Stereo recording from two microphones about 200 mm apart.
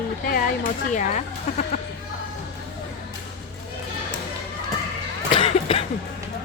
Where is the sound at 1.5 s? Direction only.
35° left (ahead or behind).